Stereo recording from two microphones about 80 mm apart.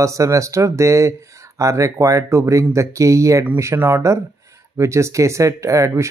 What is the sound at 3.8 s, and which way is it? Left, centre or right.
Speech, right.